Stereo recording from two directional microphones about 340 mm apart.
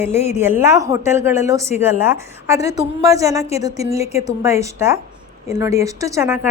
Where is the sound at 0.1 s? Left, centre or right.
Centre.